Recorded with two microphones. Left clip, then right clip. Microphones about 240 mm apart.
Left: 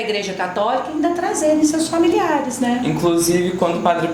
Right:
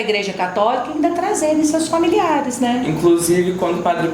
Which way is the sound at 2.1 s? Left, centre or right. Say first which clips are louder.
Right 3 dB; right.